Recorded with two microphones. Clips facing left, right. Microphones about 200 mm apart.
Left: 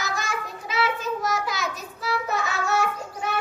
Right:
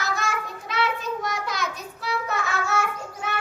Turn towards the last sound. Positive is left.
turn(degrees=0)  # may be behind; listen again after turning